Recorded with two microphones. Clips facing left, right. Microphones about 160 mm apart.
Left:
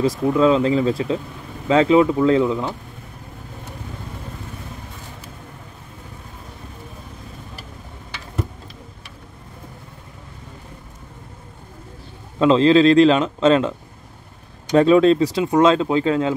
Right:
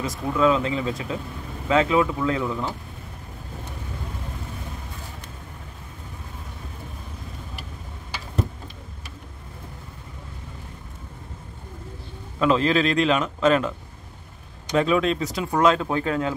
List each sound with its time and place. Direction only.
0.3 s speech: 30° left (ahead or behind)
12.4 s speech: 25° left (ahead or behind)